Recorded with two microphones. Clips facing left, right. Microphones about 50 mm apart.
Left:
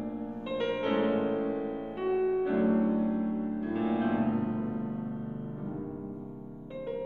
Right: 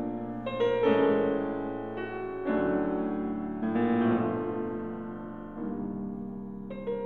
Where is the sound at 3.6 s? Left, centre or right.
Right.